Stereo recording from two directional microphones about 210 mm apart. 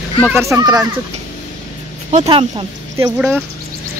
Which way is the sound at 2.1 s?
30° right (ahead or behind).